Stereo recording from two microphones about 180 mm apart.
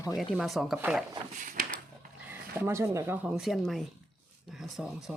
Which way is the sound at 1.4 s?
45° right (ahead or behind).